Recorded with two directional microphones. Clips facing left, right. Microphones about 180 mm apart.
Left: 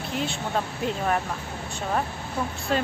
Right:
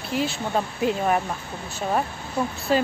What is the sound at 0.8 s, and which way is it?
Speech, 10° right (ahead or behind).